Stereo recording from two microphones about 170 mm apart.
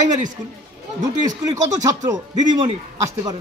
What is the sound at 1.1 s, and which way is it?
Speech, 20° right (ahead or behind).